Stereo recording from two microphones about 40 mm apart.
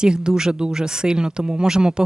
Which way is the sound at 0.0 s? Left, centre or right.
Right.